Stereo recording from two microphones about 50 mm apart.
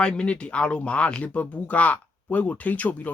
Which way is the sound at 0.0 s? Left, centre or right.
Centre.